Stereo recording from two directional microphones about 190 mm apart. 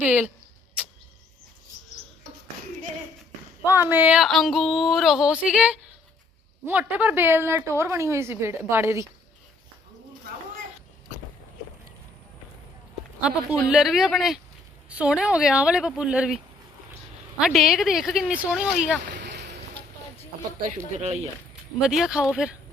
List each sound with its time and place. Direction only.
0.0 s a woman's voice: 10° right (ahead or behind)
3.7 s a woman's voice: 10° right (ahead or behind)
13.2 s speech: 5° right (ahead or behind)
17.4 s speech: centre (ahead or behind)
19.2 s boat: 60° right (ahead or behind)
21.0 s speech: 35° right (ahead or behind)
21.8 s speech: 5° right (ahead or behind)